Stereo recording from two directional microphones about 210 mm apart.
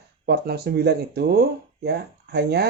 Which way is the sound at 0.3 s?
50° right (ahead or behind).